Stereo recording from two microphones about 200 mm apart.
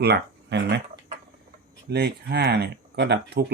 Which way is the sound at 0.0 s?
55° right (ahead or behind).